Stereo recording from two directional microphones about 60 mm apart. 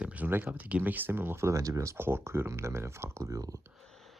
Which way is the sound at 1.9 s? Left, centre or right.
Right.